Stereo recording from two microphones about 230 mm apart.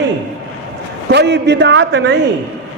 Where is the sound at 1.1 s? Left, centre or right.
Right.